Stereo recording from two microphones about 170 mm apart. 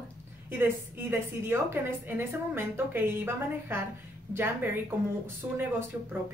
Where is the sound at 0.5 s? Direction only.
10° right (ahead or behind).